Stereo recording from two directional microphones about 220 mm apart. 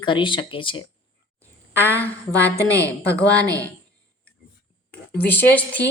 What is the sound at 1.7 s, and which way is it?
A woman's voice, 10° left (ahead or behind).